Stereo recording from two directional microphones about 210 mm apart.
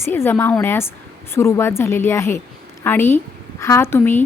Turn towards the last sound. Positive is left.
turn(degrees=10)  # may be behind; listen again after turning